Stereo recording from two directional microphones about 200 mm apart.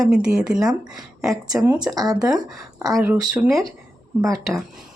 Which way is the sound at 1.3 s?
15° right (ahead or behind).